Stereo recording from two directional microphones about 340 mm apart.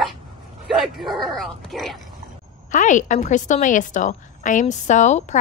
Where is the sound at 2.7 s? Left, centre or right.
Left.